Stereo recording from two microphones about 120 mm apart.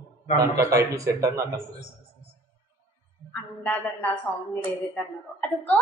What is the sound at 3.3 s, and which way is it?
A woman's voice, 15° left (ahead or behind).